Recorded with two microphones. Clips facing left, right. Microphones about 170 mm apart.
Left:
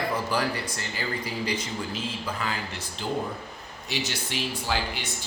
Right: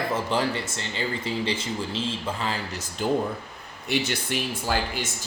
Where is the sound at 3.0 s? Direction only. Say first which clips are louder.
Right 5 dB; 50° right (ahead or behind).